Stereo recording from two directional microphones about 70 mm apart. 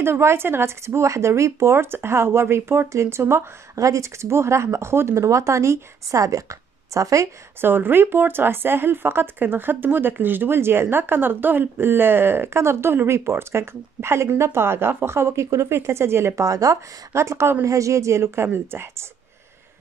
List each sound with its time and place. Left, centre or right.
0.0 s speech: right
7.6 s speech: right
16.4 s a woman's voice: right
17.6 s speech: right